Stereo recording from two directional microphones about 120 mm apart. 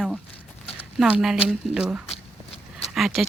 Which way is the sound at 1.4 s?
5° right (ahead or behind).